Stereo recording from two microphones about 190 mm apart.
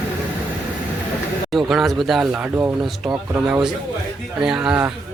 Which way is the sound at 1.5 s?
Centre (ahead or behind).